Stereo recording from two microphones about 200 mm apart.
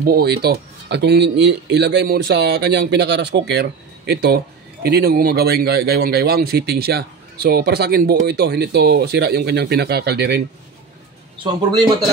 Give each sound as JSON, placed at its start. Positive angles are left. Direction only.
{"t": 0.0, "sound": "a man's voice", "side_deg": -50}
{"t": 11.3, "sound": "speech", "side_deg": -20}